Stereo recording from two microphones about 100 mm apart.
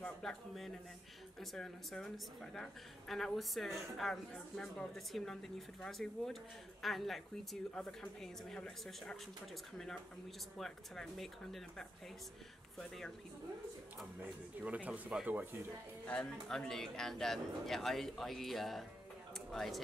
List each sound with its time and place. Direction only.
0.0 s a woman's voice: 5° left (ahead or behind)
10.6 s a woman's voice: centre (ahead or behind)
12.7 s a woman's voice: 5° left (ahead or behind)
14.2 s speech: 15° right (ahead or behind)
16.1 s a woman's voice: 10° left (ahead or behind)